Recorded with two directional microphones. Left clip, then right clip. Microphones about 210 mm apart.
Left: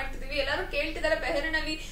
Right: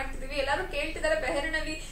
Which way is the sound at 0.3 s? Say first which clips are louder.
Even; 5° right (ahead or behind).